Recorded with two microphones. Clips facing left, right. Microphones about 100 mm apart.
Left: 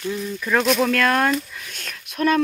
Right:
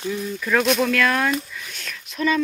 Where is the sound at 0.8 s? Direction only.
40° left (ahead or behind).